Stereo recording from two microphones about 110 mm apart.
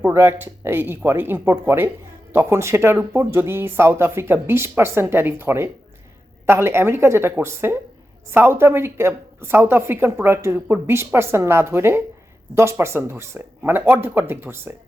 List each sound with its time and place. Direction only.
0.0 s a woman's voice: 20° right (ahead or behind)